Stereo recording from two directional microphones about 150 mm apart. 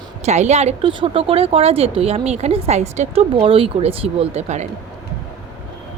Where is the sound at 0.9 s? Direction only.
35° right (ahead or behind).